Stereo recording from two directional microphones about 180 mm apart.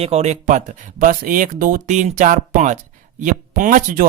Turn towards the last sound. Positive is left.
turn(degrees=-45)  # may be behind; listen again after turning